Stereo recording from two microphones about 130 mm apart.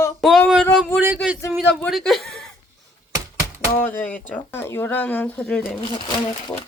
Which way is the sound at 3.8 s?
10° left (ahead or behind).